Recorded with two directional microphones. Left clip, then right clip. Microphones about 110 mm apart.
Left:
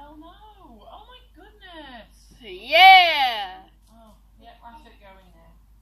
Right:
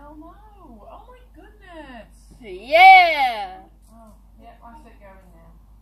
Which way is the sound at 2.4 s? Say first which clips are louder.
Right 2 dB; 70° right (ahead or behind).